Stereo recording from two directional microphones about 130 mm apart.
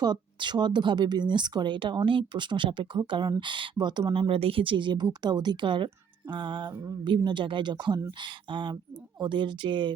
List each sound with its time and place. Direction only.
0.0 s speech: 35° right (ahead or behind)